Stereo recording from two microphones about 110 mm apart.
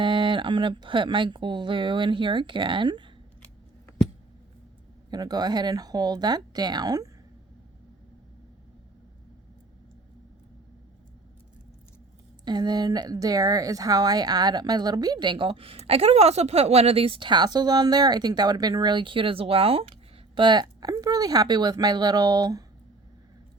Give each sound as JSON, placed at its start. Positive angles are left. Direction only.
{"t": 0.0, "sound": "speech", "side_deg": -50}
{"t": 5.1, "sound": "speech", "side_deg": -40}
{"t": 12.5, "sound": "speech", "side_deg": -40}